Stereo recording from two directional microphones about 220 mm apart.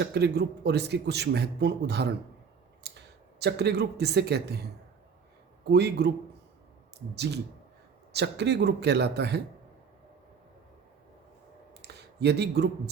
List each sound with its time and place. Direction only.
0.0 s a man's voice: 50° right (ahead or behind)
2.8 s clicking: 50° right (ahead or behind)
3.4 s a man's voice: 50° right (ahead or behind)
5.6 s a man's voice: 50° right (ahead or behind)
8.1 s a man's voice: 50° right (ahead or behind)
11.9 s a sound: 50° right (ahead or behind)
12.2 s a man's voice: 50° right (ahead or behind)